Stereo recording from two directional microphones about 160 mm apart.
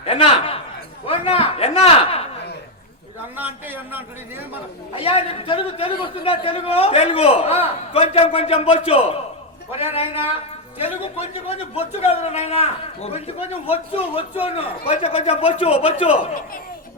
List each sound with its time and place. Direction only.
0.0 s a man's voice: 35° left (ahead or behind)
1.0 s a sound: 35° left (ahead or behind)
3.3 s a man's voice: 10° right (ahead or behind)
4.9 s a man's voice: 35° left (ahead or behind)